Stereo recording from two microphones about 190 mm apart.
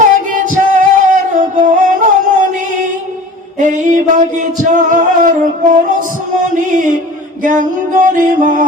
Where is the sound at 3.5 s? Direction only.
40° right (ahead or behind).